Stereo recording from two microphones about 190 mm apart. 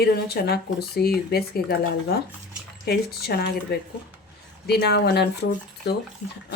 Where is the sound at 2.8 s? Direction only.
55° left (ahead or behind).